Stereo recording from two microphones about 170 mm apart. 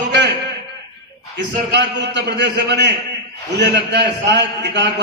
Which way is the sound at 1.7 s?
85° right.